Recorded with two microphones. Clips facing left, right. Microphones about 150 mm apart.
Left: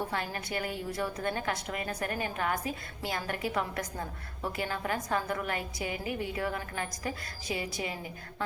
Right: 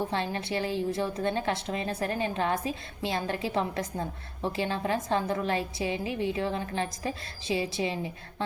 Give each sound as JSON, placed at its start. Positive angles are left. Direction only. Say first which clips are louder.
{"t": 0.1, "sound": "a woman's voice", "louder": "right 4 dB", "side_deg": -25}